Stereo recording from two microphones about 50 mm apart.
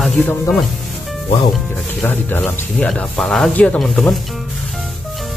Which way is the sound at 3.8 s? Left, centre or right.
Centre.